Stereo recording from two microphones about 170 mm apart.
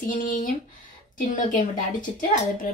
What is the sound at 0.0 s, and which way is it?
A woman's voice, 50° left (ahead or behind).